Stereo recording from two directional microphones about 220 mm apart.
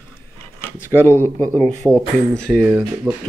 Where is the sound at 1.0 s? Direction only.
10° left (ahead or behind).